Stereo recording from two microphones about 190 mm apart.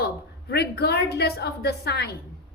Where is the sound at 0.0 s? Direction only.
55° left (ahead or behind).